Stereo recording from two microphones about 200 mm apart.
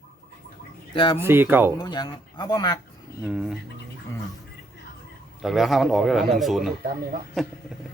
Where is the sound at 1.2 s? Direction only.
10° right (ahead or behind).